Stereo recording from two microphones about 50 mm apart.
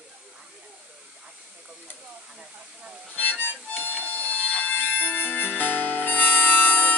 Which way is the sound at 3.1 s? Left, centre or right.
Left.